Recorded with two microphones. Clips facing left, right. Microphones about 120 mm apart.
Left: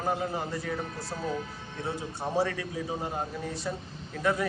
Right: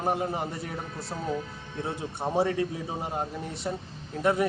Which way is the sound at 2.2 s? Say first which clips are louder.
Right 3 dB; 25° right (ahead or behind).